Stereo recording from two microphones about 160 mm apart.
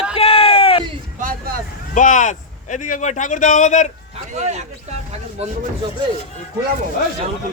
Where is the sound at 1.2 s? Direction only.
65° right (ahead or behind).